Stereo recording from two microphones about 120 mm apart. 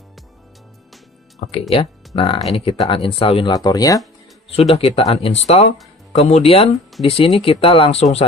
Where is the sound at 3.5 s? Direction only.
30° left (ahead or behind).